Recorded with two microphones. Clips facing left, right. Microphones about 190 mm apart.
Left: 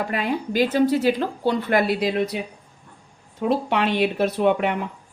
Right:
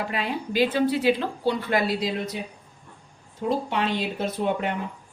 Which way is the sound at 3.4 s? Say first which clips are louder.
Left 4 dB; 70° left (ahead or behind).